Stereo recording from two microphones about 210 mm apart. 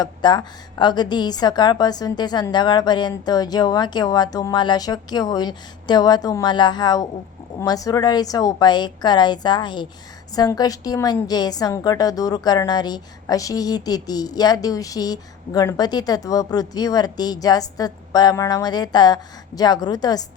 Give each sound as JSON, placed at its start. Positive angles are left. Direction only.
{"t": 0.0, "sound": "a woman's voice", "side_deg": 20}